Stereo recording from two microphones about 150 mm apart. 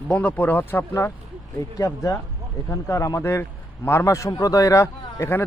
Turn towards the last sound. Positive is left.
turn(degrees=15)  # may be behind; listen again after turning